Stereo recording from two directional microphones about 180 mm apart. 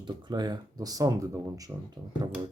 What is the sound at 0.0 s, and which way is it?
Speech, 25° right (ahead or behind).